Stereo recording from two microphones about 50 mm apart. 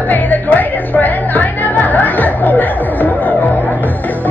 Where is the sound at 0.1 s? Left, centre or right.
Left.